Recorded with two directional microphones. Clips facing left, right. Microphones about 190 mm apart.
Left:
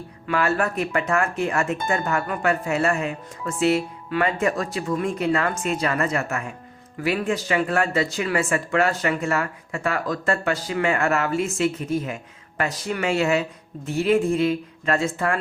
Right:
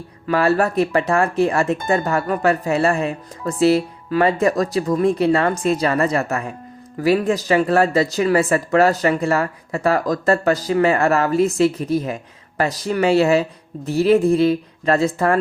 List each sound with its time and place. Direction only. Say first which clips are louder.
0.3 s speech: right 5 dB; 35° right (ahead or behind)